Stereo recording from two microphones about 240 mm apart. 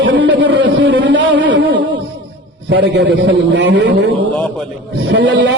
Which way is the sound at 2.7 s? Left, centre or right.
Right.